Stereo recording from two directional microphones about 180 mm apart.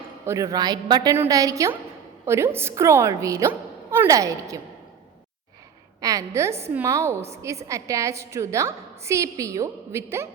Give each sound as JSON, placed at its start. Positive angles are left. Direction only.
{"t": 0.3, "sound": "a woman's voice", "side_deg": -20}
{"t": 6.0, "sound": "a woman's voice", "side_deg": -20}